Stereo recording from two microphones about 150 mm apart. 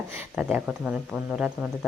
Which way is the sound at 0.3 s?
10° right (ahead or behind).